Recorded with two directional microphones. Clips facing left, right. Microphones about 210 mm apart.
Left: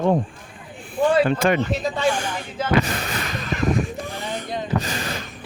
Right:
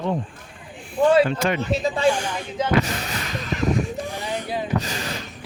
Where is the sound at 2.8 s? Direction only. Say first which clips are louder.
Left 2 dB; 55° left (ahead or behind).